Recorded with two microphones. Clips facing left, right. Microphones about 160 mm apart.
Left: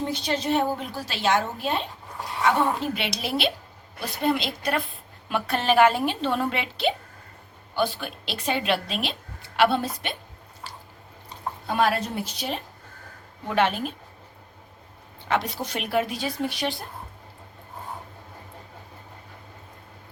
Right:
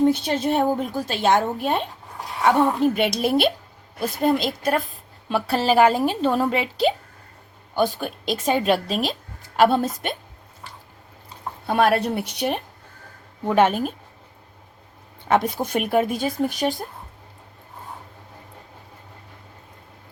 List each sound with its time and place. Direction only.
0.1 s speech: 55° right (ahead or behind)
5.3 s a woman's voice: 35° right (ahead or behind)
11.7 s speech: 60° right (ahead or behind)
13.5 s speech: 45° right (ahead or behind)
15.3 s speech: 50° right (ahead or behind)